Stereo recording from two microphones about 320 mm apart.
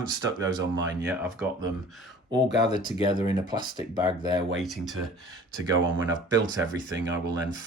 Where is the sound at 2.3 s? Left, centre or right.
Right.